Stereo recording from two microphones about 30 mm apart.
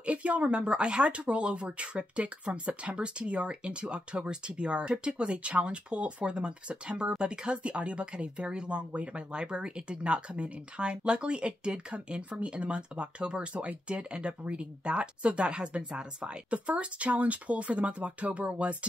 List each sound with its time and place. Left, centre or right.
0.0 s speech: right
8.7 s speech: right